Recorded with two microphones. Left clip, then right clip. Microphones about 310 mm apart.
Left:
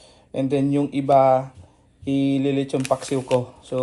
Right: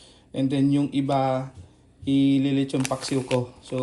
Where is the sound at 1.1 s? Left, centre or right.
Left.